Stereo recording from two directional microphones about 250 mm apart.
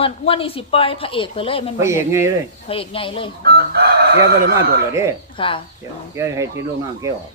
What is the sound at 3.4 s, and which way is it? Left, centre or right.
Chicken, right.